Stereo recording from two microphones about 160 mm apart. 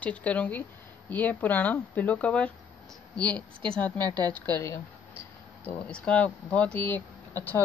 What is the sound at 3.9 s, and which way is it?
Speech, 25° right (ahead or behind).